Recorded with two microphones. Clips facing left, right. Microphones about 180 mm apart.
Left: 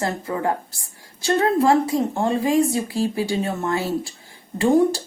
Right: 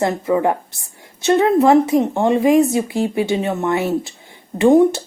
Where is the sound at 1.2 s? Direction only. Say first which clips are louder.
Right 5 dB; 20° right (ahead or behind).